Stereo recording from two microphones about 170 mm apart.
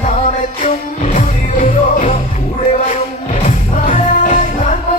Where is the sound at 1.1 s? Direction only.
40° left (ahead or behind).